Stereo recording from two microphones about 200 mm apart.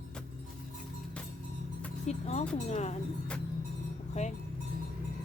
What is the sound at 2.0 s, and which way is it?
Speech, 35° left (ahead or behind).